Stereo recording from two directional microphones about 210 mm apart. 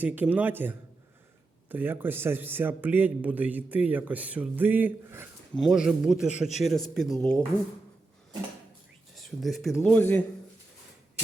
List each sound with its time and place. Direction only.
0.0 s a man's voice: 10° right (ahead or behind)
9.1 s a man's voice: centre (ahead or behind)